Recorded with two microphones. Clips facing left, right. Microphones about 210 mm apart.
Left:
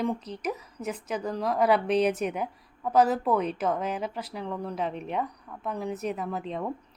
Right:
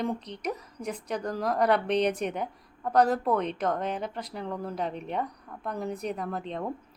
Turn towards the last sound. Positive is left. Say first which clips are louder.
# left 1 dB
turn(degrees=5)  # may be behind; listen again after turning